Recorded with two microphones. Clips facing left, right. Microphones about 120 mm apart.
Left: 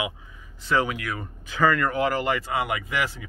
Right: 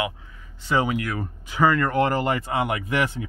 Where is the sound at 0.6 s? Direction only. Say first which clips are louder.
Right 2 dB; 20° right (ahead or behind).